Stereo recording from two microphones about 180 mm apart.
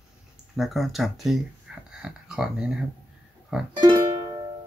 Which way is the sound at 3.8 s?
25° right (ahead or behind).